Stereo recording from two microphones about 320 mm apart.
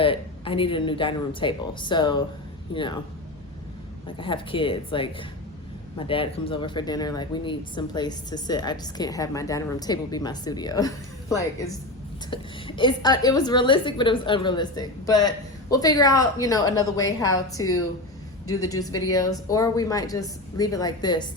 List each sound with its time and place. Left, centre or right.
0.0 s speech: centre
4.2 s speech: centre
18.7 s speech: centre